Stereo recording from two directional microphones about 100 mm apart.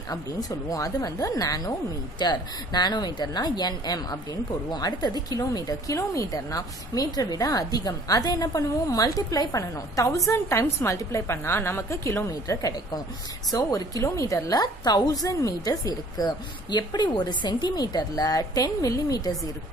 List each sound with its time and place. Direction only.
0.1 s speech: 40° left (ahead or behind)